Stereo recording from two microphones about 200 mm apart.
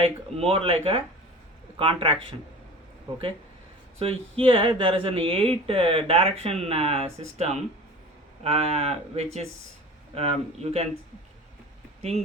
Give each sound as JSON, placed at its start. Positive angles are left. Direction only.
{"t": 0.0, "sound": "speech", "side_deg": -30}
{"t": 3.9, "sound": "speech", "side_deg": -30}